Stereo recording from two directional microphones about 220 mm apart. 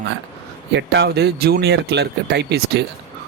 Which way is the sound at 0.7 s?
50° right (ahead or behind).